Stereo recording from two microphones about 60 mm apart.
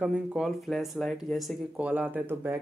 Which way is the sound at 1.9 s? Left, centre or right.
Right.